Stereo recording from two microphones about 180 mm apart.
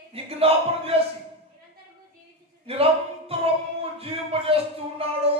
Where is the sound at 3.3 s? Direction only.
35° right (ahead or behind).